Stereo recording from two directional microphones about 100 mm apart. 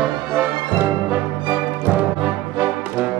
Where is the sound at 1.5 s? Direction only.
15° right (ahead or behind).